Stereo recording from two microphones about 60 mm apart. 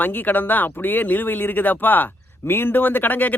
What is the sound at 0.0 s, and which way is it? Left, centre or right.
Speech, left.